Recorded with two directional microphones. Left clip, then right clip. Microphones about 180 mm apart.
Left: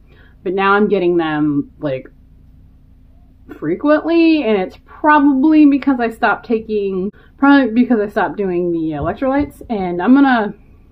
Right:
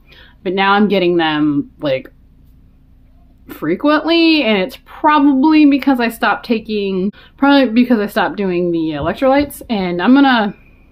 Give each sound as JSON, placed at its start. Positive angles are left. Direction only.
{"t": 0.1, "sound": "a woman's voice", "side_deg": -15}
{"t": 3.4, "sound": "speech", "side_deg": -20}